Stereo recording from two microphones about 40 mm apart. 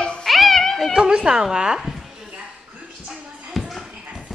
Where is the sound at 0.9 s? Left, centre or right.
Centre.